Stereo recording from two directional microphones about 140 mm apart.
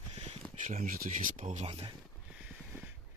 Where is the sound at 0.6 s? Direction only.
60° right (ahead or behind).